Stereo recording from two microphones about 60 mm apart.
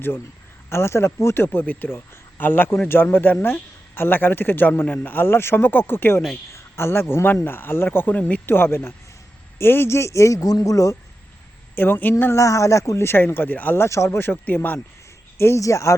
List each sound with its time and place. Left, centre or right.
0.7 s speech: left
1.6 s a man's voice: left
11.7 s a woman's voice: left
12.3 s a woman's voice: left
13.1 s speech: left
13.8 s speech: left
15.4 s speech: left
15.6 s a woman's voice: left